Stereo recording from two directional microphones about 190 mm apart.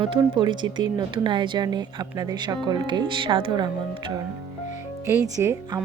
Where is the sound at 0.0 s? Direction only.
25° right (ahead or behind).